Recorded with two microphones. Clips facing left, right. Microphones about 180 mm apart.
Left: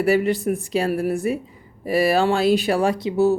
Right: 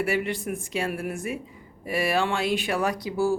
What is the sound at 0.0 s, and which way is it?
Speech, 35° left (ahead or behind).